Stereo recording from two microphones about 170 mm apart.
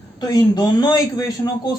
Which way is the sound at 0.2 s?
25° left (ahead or behind).